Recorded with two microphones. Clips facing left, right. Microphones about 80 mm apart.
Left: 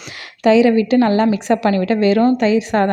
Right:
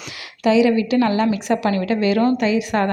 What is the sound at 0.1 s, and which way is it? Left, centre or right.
A woman's voice, left.